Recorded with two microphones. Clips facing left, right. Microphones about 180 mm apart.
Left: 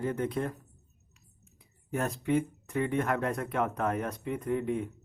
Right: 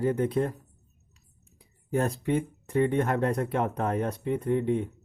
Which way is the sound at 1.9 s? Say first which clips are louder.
Right 2 dB; 35° right (ahead or behind).